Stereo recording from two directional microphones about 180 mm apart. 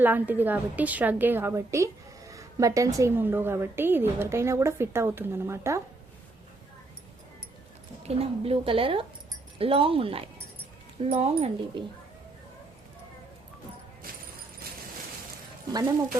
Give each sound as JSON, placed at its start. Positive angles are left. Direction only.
{"t": 0.0, "sound": "a woman's voice", "side_deg": -10}
{"t": 8.0, "sound": "a woman's voice", "side_deg": -35}